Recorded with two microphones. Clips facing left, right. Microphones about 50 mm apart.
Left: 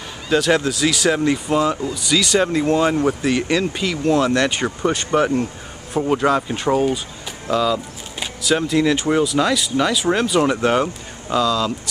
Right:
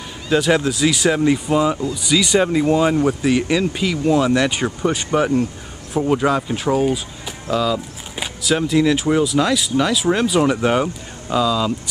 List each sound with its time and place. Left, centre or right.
0.3 s speech: centre